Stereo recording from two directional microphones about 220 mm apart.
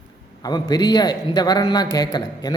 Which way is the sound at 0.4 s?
20° left (ahead or behind).